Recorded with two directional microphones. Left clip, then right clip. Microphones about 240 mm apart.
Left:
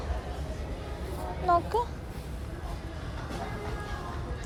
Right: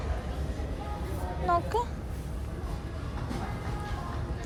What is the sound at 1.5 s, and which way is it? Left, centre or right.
Speech, centre.